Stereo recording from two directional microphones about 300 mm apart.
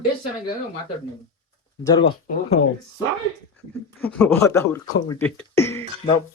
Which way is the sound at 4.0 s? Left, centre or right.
Centre.